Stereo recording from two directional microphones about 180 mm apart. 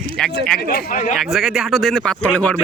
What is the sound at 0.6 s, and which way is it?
Speech, 55° left (ahead or behind).